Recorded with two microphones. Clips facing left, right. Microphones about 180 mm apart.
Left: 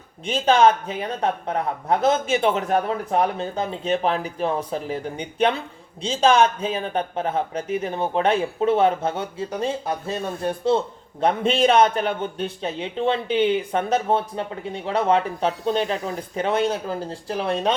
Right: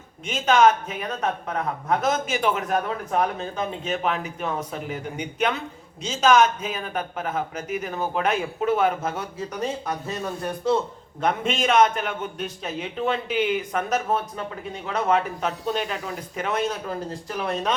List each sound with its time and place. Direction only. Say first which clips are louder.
0.3 s a man's voice: left 2 dB; 30° left (ahead or behind)